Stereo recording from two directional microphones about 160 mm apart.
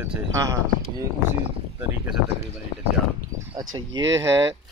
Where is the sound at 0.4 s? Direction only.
20° right (ahead or behind).